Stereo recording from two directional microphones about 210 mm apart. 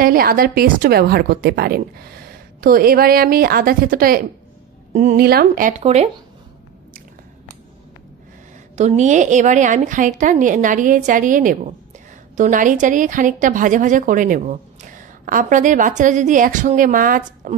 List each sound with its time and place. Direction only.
0.0 s a woman's voice: 45° right (ahead or behind)
8.7 s a woman's voice: 35° right (ahead or behind)